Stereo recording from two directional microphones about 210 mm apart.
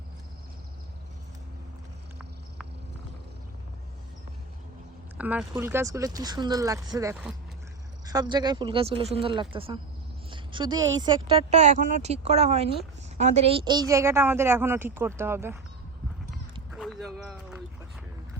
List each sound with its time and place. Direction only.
5.1 s a woman's voice: 5° right (ahead or behind)
11.5 s a woman's voice: 35° right (ahead or behind); by 15.5 s 10° right (ahead or behind)